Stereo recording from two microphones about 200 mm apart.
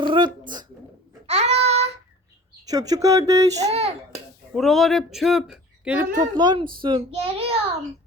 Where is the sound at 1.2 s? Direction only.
30° right (ahead or behind).